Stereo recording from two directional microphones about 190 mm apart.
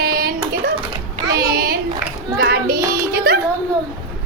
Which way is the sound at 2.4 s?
55° right (ahead or behind).